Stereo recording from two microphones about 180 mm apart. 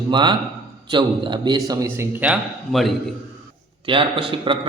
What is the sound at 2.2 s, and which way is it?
Speech, 5° right (ahead or behind).